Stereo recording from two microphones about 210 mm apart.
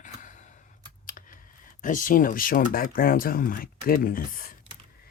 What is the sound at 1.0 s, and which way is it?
Typing, 40° left (ahead or behind).